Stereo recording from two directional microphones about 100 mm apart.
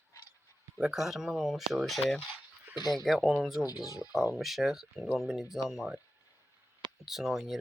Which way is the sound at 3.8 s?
40° left (ahead or behind).